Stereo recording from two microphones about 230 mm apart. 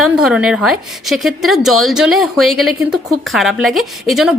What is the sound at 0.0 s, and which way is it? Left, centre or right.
A woman's voice, centre.